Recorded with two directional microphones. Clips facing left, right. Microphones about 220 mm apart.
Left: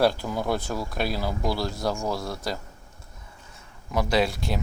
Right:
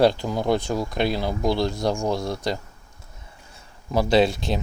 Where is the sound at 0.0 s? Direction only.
20° right (ahead or behind).